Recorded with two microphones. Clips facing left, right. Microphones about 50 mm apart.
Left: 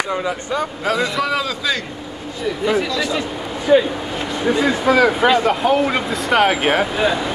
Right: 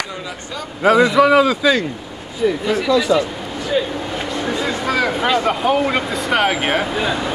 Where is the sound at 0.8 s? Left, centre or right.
Centre.